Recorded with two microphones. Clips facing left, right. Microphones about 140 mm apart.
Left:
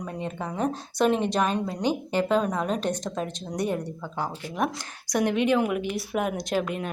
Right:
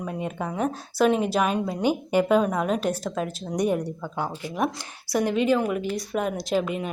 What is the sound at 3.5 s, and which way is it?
Speech, 15° right (ahead or behind).